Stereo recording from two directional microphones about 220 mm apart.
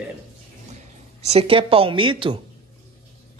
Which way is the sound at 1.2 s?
25° right (ahead or behind).